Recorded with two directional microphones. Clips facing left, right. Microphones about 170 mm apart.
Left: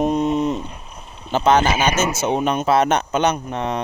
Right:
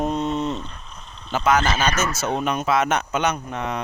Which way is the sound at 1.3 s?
30° left (ahead or behind).